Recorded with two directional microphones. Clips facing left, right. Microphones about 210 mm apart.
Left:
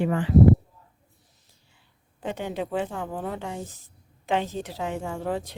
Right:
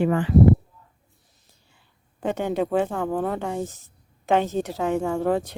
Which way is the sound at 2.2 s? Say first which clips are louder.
Right 6 dB; 50° right (ahead or behind).